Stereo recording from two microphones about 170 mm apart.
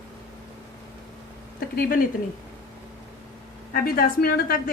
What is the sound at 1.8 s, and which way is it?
Speech, 60° left (ahead or behind).